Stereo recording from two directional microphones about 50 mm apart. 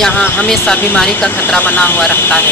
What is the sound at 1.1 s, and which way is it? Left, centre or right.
Speech, left.